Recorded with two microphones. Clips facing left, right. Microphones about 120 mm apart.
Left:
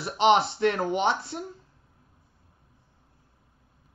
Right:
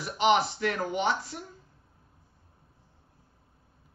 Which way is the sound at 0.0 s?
30° left (ahead or behind).